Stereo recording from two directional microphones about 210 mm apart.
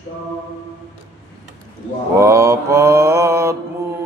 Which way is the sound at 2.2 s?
15° right (ahead or behind).